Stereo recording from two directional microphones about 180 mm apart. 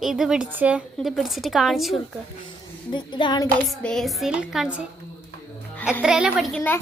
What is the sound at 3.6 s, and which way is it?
Speech, 5° left (ahead or behind).